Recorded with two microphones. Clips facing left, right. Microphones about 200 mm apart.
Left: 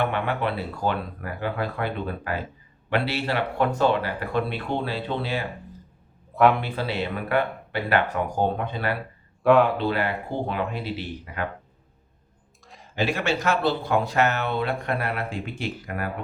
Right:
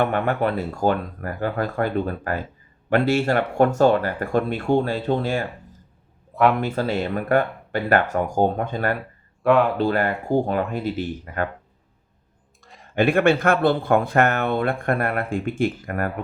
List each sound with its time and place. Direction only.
0.0 s speech: 45° right (ahead or behind)
6.3 s a man's voice: centre (ahead or behind)
6.6 s speech: 45° right (ahead or behind)
9.4 s speech: centre (ahead or behind)
9.7 s speech: 45° right (ahead or behind)
12.6 s a sound: centre (ahead or behind)
12.9 s speech: 55° right (ahead or behind)